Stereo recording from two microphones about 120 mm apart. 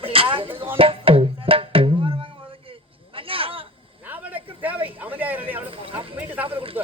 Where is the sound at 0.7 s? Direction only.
50° right (ahead or behind).